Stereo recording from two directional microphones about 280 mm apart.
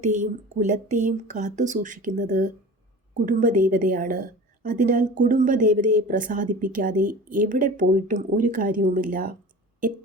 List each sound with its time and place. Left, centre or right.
0.0 s a woman's voice: right